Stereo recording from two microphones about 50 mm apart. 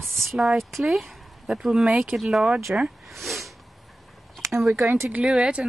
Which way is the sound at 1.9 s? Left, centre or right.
Right.